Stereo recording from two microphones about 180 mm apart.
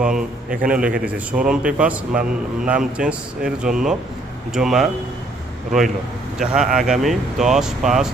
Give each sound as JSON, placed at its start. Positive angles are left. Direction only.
{"t": 0.0, "sound": "speech", "side_deg": -5}
{"t": 6.4, "sound": "speech", "side_deg": -5}